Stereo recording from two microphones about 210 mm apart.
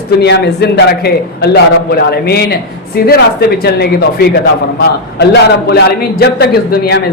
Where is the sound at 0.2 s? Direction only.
55° left (ahead or behind).